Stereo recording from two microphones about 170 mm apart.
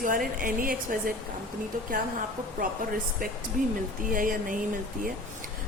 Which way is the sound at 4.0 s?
55° right (ahead or behind).